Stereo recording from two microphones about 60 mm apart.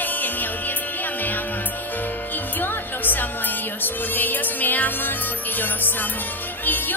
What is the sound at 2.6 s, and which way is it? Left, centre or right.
Music, left.